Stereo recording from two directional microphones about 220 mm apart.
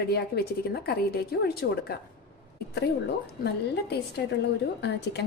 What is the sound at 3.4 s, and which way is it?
Speech, 50° left (ahead or behind).